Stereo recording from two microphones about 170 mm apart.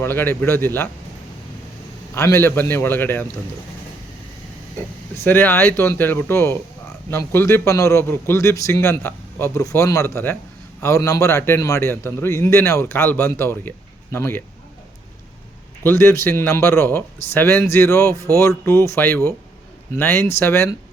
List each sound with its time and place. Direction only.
0.0 s a man's voice: 10° left (ahead or behind)
2.1 s a man's voice: 15° left (ahead or behind)
5.1 s a man's voice: 15° left (ahead or behind)
15.8 s a man's voice: 15° left (ahead or behind)